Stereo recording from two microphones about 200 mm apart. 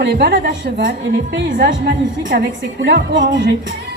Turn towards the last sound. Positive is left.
turn(degrees=-60)  # may be behind; listen again after turning